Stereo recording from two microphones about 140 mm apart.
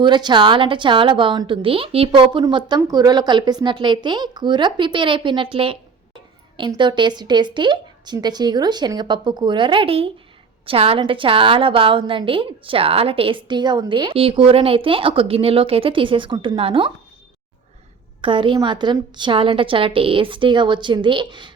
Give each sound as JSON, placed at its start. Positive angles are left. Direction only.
{"t": 0.0, "sound": "a woman's voice", "side_deg": -30}
{"t": 18.2, "sound": "a woman's voice", "side_deg": -35}